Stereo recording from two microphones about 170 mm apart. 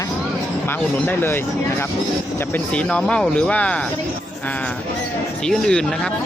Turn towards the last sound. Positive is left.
turn(degrees=5)  # may be behind; listen again after turning